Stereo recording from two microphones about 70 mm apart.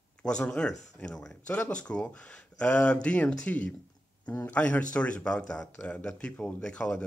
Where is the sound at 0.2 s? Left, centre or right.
Centre.